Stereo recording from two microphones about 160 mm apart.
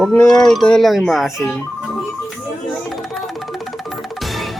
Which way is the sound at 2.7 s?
Centre (ahead or behind).